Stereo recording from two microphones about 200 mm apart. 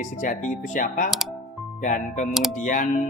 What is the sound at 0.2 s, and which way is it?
Speech, 40° left (ahead or behind).